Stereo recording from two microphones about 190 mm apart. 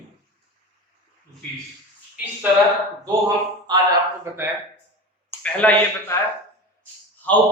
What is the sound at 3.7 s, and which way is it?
Speech, 20° right (ahead or behind).